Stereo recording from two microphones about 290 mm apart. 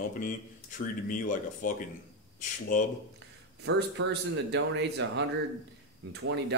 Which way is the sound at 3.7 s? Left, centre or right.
Right.